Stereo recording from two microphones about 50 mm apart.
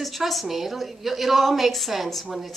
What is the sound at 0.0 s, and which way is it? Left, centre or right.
A woman's voice, centre.